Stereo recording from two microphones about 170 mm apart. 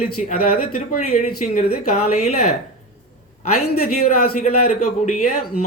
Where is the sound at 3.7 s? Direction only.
60° left (ahead or behind).